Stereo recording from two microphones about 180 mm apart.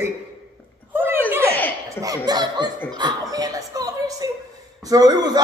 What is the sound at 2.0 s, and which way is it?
Speech, 20° right (ahead or behind).